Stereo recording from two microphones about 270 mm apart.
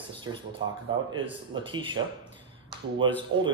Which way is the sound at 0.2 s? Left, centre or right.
Centre.